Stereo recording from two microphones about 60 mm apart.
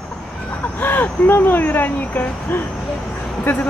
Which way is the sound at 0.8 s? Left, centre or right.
Left.